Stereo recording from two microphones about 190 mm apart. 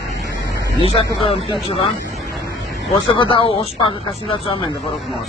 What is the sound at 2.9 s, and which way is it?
Speech, 25° left (ahead or behind).